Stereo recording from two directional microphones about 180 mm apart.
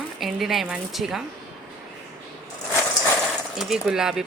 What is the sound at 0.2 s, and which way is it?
A woman's voice, centre (ahead or behind).